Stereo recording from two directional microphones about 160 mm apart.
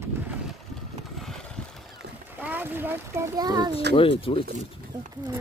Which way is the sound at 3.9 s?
35° left (ahead or behind).